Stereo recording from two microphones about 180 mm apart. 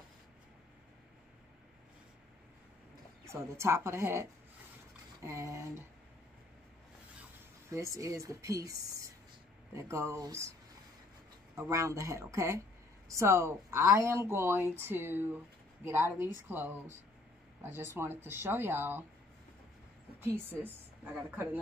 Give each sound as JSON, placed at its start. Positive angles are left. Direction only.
{"t": 3.3, "sound": "speech", "side_deg": -15}
{"t": 7.7, "sound": "speech", "side_deg": -15}
{"t": 9.8, "sound": "speech", "side_deg": -15}
{"t": 11.5, "sound": "speech", "side_deg": -15}
{"t": 20.2, "sound": "speech", "side_deg": -10}